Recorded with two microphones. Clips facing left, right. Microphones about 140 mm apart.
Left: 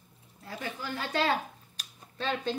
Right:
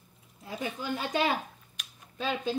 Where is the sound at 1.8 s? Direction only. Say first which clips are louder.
Right 1 dB; 35° left (ahead or behind).